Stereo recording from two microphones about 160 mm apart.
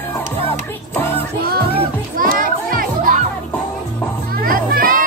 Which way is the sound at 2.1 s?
60° right (ahead or behind).